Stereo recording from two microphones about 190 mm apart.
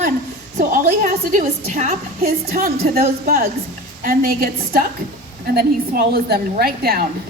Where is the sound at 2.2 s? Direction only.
50° right (ahead or behind).